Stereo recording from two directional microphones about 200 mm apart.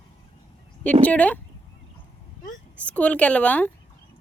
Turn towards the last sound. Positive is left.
turn(degrees=5)  # may be behind; listen again after turning